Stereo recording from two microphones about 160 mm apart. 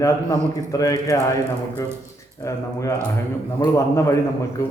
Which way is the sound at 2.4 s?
20° left (ahead or behind).